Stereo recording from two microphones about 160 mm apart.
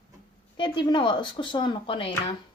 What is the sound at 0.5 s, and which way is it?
Speech, 30° left (ahead or behind).